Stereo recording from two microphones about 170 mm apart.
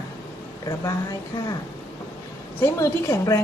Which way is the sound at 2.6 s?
20° left (ahead or behind).